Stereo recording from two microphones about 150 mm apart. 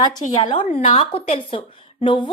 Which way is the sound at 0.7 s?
45° left (ahead or behind).